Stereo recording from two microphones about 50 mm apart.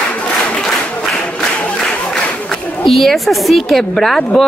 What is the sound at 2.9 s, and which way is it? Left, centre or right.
A woman's voice, centre.